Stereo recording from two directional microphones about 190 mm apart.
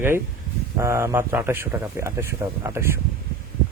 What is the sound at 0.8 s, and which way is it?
Speech, 15° right (ahead or behind).